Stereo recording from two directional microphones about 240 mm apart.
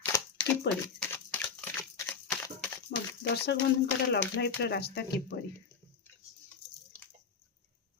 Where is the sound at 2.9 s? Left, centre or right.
Left.